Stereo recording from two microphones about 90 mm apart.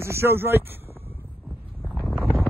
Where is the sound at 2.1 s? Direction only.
Centre (ahead or behind).